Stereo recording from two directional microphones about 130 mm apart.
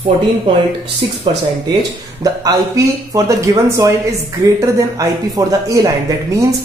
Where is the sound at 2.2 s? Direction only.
25° right (ahead or behind).